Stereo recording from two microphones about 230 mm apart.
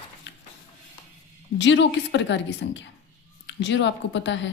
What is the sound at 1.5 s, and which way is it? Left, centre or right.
Speech, left.